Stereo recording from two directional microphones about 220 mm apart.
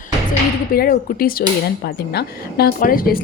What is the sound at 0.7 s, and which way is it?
A woman's voice, 40° left (ahead or behind).